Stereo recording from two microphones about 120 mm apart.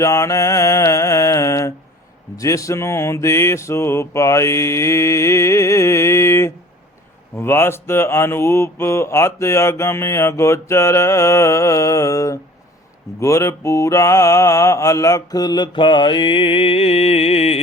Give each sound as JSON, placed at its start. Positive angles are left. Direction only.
{"t": 0.0, "sound": "mantra", "side_deg": 25}